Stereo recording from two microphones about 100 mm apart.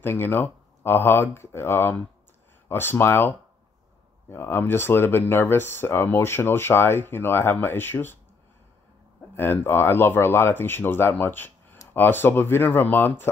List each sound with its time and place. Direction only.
0.0 s speech: 25° left (ahead or behind)
9.3 s speech: 20° left (ahead or behind)